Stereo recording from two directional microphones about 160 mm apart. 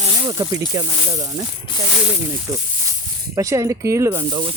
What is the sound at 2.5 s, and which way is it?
Speech, 20° right (ahead or behind).